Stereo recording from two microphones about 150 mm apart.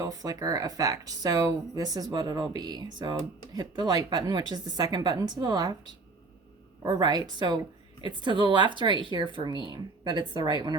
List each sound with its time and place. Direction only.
0.0 s speech: 25° right (ahead or behind)